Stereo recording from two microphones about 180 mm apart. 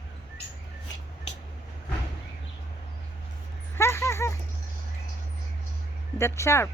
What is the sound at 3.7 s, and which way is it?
Dog, 15° left (ahead or behind).